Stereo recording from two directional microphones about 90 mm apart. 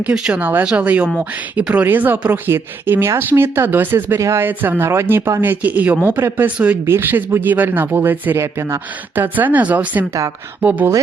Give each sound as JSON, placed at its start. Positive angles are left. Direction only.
{"t": 0.0, "sound": "speech", "side_deg": -15}